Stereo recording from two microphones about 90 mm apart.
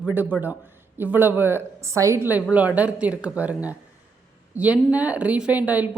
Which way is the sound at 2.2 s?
15° right (ahead or behind).